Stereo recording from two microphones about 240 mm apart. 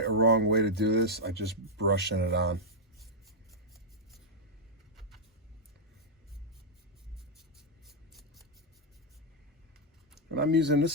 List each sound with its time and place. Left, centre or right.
0.0 s speech: right
7.9 s a sound: centre
10.3 s speech: right